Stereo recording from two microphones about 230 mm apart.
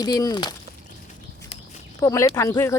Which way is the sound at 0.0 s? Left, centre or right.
Centre.